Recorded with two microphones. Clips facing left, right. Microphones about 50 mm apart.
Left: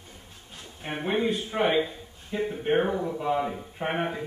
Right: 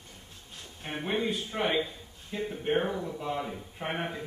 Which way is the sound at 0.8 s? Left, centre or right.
Centre.